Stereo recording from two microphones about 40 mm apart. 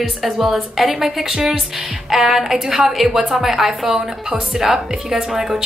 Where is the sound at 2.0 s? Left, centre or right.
Centre.